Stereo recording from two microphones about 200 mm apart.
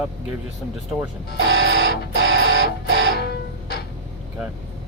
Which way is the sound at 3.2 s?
55° left (ahead or behind).